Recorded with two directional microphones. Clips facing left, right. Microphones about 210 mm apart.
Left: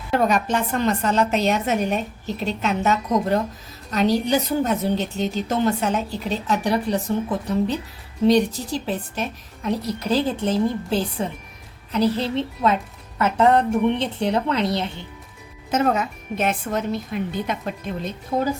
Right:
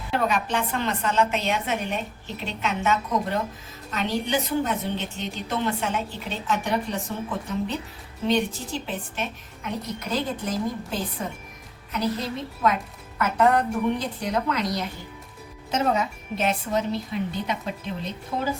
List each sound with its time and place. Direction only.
0.1 s a woman's voice: 45° left (ahead or behind); by 10.6 s 30° left (ahead or behind)
11.9 s a woman's voice: 30° left (ahead or behind)
15.7 s speech: 55° left (ahead or behind)